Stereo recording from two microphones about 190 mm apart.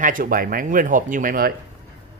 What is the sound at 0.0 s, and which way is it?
Speech, 45° right (ahead or behind).